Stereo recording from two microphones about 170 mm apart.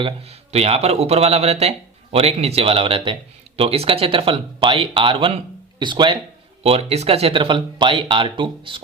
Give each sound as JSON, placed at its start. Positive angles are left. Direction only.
{"t": 0.0, "sound": "speech", "side_deg": -40}